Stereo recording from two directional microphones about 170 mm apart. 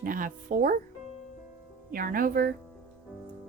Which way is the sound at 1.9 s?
55° right (ahead or behind).